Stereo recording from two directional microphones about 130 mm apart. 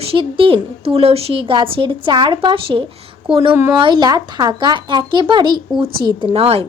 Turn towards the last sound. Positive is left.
turn(degrees=-50)  # may be behind; listen again after turning